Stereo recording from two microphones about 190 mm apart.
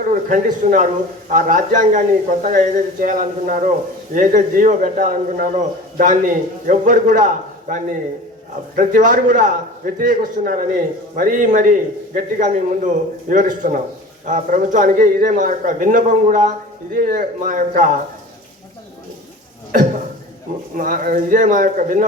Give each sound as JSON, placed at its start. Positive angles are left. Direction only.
{"t": 0.0, "sound": "a man's voice", "side_deg": -45}
{"t": 20.7, "sound": "a man's voice", "side_deg": -45}